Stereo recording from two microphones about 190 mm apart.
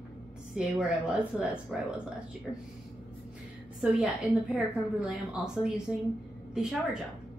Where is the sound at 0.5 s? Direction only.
5° right (ahead or behind).